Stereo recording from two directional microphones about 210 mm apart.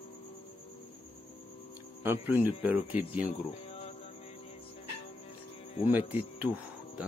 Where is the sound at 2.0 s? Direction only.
10° right (ahead or behind).